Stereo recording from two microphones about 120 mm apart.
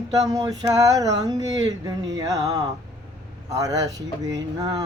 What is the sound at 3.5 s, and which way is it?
Speech, 30° right (ahead or behind).